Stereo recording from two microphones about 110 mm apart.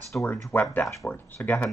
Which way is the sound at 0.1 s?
25° left (ahead or behind).